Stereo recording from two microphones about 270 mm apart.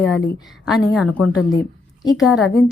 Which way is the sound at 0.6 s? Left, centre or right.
Centre.